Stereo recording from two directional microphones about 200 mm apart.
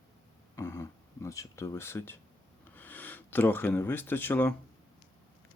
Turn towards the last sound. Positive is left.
turn(degrees=10)  # may be behind; listen again after turning